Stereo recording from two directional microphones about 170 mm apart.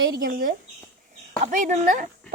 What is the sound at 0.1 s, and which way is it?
Speech, 60° right (ahead or behind).